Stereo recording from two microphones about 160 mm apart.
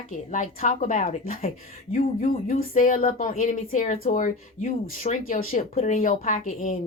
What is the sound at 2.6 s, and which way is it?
Speech, 55° left (ahead or behind).